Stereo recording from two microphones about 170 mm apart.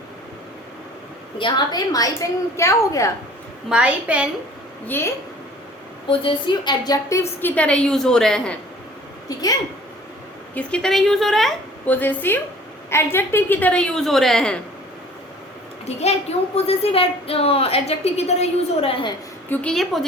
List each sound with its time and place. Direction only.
1.4 s a woman's voice: 25° left (ahead or behind)
3.7 s a woman's voice: 5° right (ahead or behind)
4.9 s a woman's voice: 15° left (ahead or behind)
6.1 s a woman's voice: 30° left (ahead or behind); by 8.5 s 5° left (ahead or behind)
10.5 s a woman's voice: 5° left (ahead or behind)
15.9 s a woman's voice: 40° left (ahead or behind)
19.5 s a woman's voice: 5° left (ahead or behind)